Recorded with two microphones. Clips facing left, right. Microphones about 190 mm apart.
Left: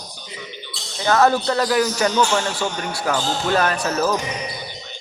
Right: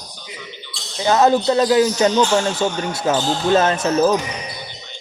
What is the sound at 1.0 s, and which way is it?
A man's voice, 20° right (ahead or behind).